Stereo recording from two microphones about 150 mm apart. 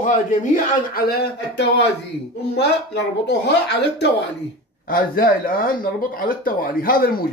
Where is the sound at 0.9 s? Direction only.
90° left.